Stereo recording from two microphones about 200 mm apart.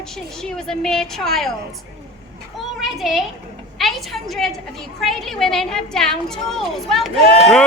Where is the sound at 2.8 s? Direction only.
Centre (ahead or behind).